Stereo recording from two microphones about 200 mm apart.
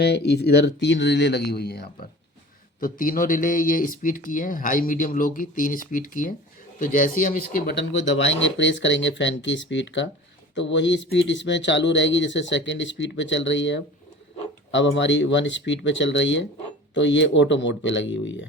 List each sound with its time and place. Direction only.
0.0 s speech: 55° left (ahead or behind)